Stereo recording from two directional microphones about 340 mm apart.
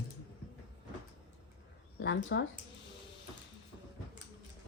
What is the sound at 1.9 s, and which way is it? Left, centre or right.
Speech, left.